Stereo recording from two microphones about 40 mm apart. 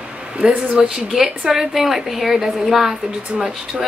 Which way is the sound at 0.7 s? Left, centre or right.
Centre.